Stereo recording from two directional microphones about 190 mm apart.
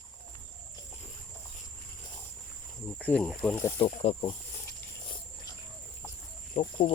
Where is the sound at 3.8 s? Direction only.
30° left (ahead or behind).